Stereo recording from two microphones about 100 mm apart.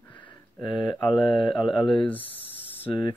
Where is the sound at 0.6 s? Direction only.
50° left (ahead or behind).